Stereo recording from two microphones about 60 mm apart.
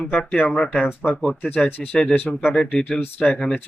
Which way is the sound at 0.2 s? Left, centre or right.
Centre.